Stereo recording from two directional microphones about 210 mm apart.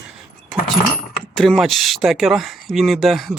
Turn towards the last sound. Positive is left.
turn(degrees=0)  # may be behind; listen again after turning